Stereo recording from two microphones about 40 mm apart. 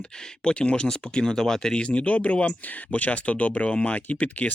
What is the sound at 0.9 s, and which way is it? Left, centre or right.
Speech, centre.